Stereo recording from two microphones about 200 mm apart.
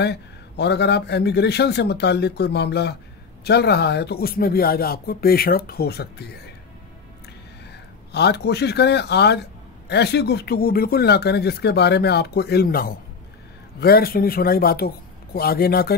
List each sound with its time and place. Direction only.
0.0 s a man's voice: 55° left (ahead or behind)
8.1 s a man's voice: 55° left (ahead or behind)